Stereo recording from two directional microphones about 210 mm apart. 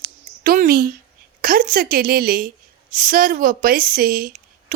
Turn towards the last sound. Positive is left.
turn(degrees=-45)  # may be behind; listen again after turning